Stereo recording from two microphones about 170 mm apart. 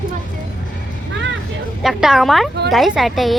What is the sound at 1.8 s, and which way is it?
A woman's voice, centre (ahead or behind).